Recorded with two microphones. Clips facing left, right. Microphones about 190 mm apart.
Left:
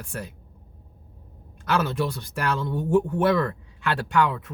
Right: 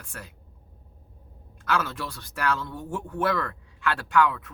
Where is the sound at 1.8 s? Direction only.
20° left (ahead or behind).